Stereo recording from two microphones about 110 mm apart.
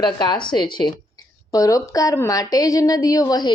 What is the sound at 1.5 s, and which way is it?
A woman's voice, 30° left (ahead or behind).